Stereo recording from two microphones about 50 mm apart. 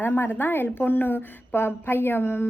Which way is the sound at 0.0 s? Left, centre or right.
Left.